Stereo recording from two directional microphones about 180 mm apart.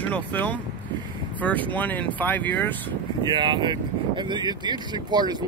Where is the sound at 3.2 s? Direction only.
25° right (ahead or behind).